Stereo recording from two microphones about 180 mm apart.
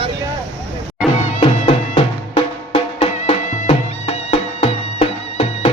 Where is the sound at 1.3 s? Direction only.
40° left (ahead or behind).